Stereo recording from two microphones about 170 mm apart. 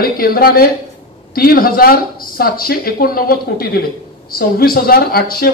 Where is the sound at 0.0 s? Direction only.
60° left (ahead or behind).